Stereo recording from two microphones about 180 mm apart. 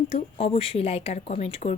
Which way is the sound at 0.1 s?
35° left (ahead or behind).